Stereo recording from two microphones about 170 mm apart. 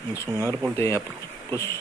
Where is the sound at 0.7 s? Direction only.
15° left (ahead or behind).